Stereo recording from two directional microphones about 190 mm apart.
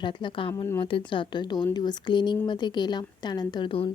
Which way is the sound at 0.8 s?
25° left (ahead or behind).